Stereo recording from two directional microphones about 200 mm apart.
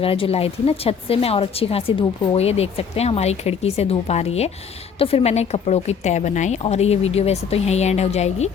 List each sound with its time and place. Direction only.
0.0 s a woman's voice: 30° left (ahead or behind)